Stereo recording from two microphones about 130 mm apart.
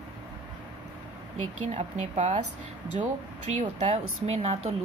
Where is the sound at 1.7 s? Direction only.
70° right (ahead or behind); by 4.7 s 55° right (ahead or behind).